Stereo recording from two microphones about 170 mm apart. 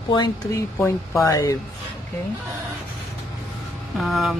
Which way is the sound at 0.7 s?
15° left (ahead or behind).